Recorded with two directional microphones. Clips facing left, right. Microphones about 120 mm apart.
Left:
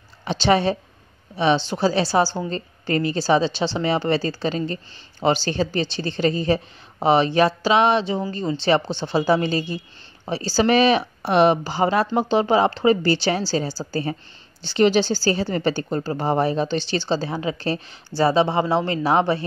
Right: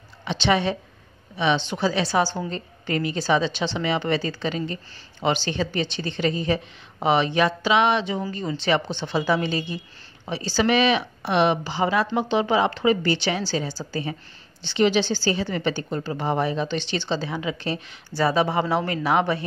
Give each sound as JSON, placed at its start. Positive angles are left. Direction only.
{"t": 0.2, "sound": "a woman's voice", "side_deg": 40}